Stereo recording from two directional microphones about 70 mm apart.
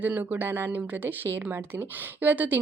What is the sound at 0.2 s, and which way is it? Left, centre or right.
A woman's voice, right.